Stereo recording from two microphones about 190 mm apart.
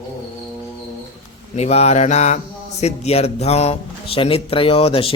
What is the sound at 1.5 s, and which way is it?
A man's voice, 35° left (ahead or behind).